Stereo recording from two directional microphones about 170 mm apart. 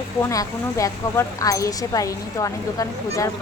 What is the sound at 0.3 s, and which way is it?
Speech, 20° left (ahead or behind).